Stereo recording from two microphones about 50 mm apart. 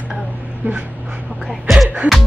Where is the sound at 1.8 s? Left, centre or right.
Right.